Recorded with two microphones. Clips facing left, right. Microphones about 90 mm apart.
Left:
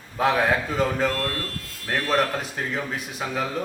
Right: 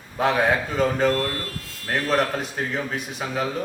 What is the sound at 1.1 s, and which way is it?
Speech, 20° right (ahead or behind).